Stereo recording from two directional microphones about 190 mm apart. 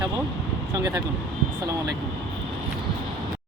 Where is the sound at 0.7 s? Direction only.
20° right (ahead or behind).